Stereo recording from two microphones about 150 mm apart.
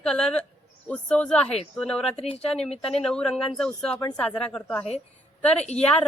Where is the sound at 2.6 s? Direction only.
45° left (ahead or behind).